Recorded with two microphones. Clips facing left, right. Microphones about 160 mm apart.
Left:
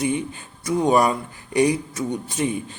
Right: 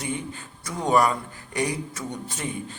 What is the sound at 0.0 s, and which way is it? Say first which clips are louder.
A man's voice: left 7 dB; 15° left (ahead or behind).